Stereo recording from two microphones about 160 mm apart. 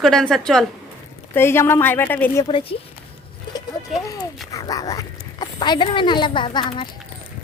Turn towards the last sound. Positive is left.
turn(degrees=30)  # may be behind; listen again after turning